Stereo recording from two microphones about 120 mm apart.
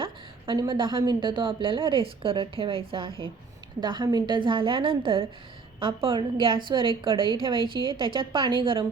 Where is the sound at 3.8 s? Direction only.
40° right (ahead or behind).